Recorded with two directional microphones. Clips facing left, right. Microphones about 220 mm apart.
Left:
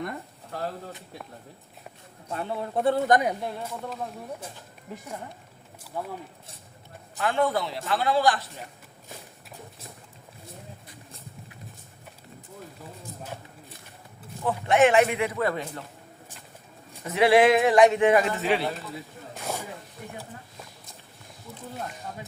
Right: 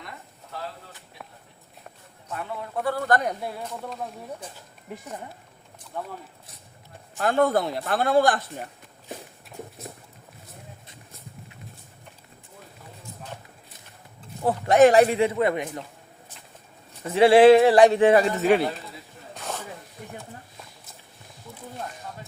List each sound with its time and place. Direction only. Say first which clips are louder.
2.3 s speech: left 3 dB; 30° left (ahead or behind)
3.6 s speech: even; 5° left (ahead or behind)
5.8 s speech: even; 5° left (ahead or behind)
7.2 s a man's voice: right 4 dB; 40° right (ahead or behind)
14.4 s a man's voice: right 4 dB; 40° right (ahead or behind); by 15.8 s 20° right (ahead or behind)
17.1 s a man's voice: right 5 dB; 30° right (ahead or behind)
19.4 s snake: left 1 dB; 10° left (ahead or behind)